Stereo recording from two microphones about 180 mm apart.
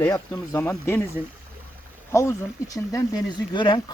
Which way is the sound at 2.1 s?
15° left (ahead or behind).